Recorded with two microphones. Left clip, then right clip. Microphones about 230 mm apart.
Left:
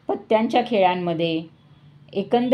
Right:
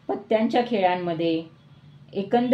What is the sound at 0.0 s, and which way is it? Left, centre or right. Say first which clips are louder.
A woman's voice: left 3 dB; left.